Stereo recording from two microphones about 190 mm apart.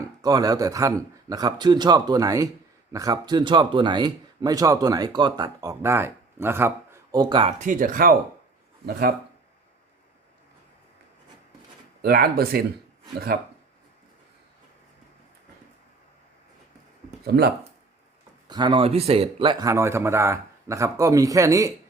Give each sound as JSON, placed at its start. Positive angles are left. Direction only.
{"t": 0.0, "sound": "speech", "side_deg": -20}
{"t": 7.6, "sound": "speech", "side_deg": -45}
{"t": 12.0, "sound": "speech", "side_deg": -50}
{"t": 17.2, "sound": "speech", "side_deg": -55}
{"t": 18.4, "sound": "speech", "side_deg": -20}